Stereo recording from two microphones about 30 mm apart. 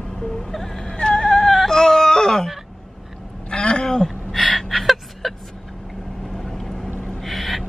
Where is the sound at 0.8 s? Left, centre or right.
Left.